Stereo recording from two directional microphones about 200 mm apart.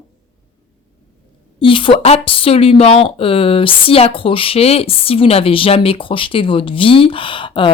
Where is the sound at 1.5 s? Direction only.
25° left (ahead or behind).